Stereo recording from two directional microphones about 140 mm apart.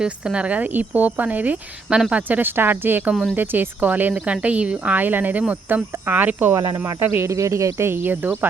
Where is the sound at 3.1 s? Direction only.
Centre (ahead or behind).